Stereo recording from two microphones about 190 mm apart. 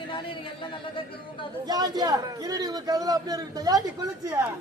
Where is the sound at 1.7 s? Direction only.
20° right (ahead or behind).